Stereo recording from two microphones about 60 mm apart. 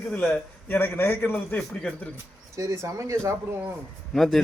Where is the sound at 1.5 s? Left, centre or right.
Left.